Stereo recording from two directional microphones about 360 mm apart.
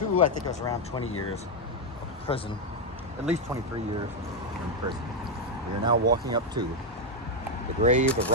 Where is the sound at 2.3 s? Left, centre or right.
Centre.